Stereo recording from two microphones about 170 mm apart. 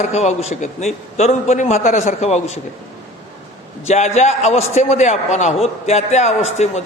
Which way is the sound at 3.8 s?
40° left (ahead or behind).